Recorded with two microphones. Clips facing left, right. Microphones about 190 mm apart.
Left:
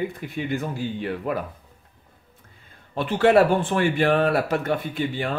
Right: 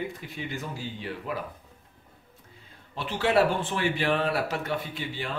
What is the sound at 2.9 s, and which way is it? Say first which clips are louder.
Speech: left 7 dB; 55° left (ahead or behind).